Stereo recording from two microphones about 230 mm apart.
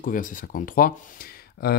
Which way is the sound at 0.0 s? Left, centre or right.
Left.